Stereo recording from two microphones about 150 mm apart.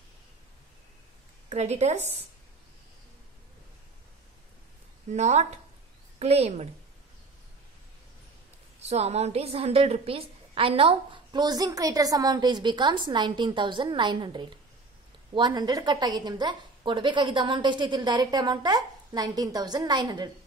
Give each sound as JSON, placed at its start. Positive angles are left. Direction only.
{"t": 1.5, "sound": "a woman's voice", "side_deg": -45}
{"t": 5.1, "sound": "a woman's voice", "side_deg": -50}
{"t": 8.7, "sound": "a woman's voice", "side_deg": -45}